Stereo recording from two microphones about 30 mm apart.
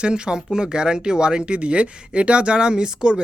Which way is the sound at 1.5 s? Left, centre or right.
Right.